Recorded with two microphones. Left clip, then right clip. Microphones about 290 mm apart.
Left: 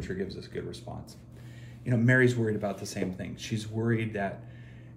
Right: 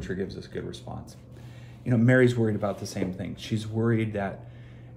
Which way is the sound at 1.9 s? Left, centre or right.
Centre.